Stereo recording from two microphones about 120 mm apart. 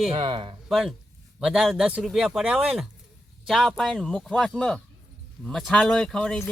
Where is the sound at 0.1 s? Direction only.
45° right (ahead or behind).